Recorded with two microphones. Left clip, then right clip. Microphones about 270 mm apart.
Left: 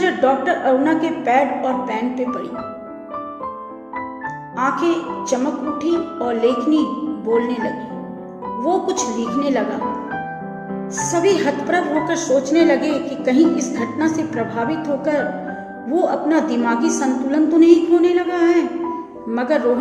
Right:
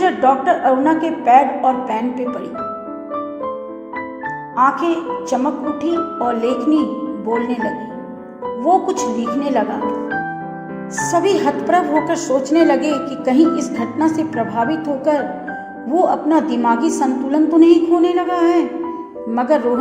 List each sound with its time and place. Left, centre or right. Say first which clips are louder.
0.0 s a woman's voice: right 3 dB; right
4.8 s a woman's voice: right 1 dB; right
11.1 s a woman's voice: right 1 dB; right